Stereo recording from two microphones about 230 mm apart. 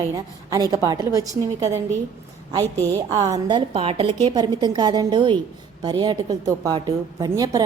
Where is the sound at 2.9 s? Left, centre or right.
Centre.